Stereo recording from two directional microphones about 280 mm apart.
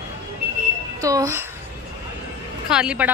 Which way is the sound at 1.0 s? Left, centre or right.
Centre.